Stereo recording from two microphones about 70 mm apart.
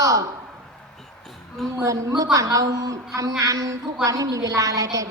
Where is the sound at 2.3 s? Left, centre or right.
Right.